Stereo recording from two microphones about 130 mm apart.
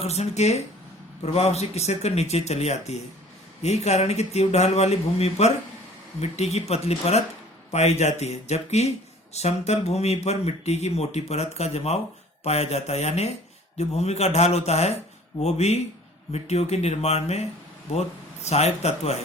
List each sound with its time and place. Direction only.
0.0 s speech: 55° left (ahead or behind)
18.4 s speech: 55° left (ahead or behind)